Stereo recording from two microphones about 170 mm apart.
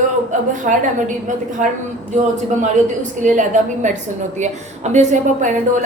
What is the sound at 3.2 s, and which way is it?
Speech, 45° right (ahead or behind).